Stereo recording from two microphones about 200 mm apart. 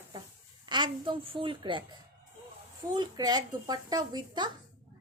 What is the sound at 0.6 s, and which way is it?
Speech, 20° right (ahead or behind).